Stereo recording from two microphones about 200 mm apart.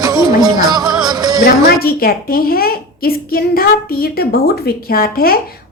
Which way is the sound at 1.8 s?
50° left (ahead or behind).